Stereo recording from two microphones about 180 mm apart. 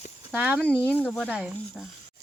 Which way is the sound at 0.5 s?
5° left (ahead or behind).